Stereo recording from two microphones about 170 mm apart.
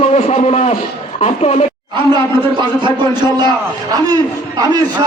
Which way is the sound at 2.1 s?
30° right (ahead or behind).